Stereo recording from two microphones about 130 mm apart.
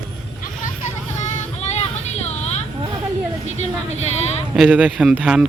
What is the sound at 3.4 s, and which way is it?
Speech, 55° left (ahead or behind).